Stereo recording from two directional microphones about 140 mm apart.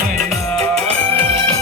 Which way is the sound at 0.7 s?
45° right (ahead or behind).